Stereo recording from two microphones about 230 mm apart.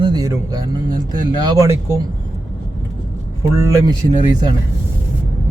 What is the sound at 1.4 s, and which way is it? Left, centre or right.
Speech, centre.